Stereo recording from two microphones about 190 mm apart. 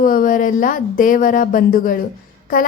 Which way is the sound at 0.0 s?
45° left (ahead or behind).